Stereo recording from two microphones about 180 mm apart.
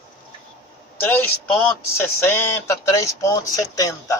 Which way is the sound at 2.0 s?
10° left (ahead or behind).